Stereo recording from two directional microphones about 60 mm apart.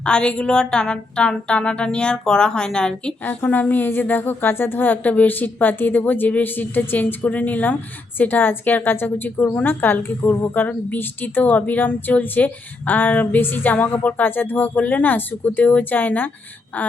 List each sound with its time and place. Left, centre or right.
0.0 s music: centre
3.2 s a woman's voice: left